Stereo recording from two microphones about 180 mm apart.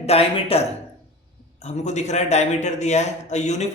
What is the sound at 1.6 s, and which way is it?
A man's voice, 40° left (ahead or behind).